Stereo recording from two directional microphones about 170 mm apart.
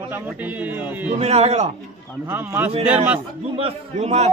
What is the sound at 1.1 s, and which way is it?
Speech, 40° right (ahead or behind).